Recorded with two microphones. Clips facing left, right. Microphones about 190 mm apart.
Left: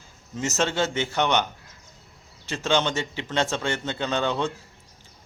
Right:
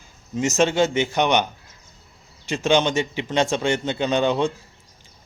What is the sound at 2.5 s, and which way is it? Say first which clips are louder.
A man's voice: right 5 dB; 15° right (ahead or behind).